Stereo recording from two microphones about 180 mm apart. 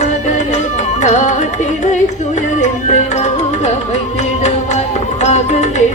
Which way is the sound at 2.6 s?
40° left (ahead or behind).